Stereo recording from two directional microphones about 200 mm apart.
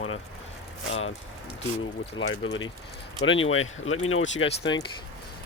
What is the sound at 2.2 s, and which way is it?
Speech, 85° left.